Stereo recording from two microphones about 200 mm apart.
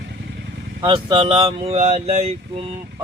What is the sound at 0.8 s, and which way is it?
Speech, 25° right (ahead or behind).